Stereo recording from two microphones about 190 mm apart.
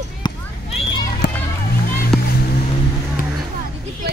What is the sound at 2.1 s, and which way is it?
Boat, centre (ahead or behind).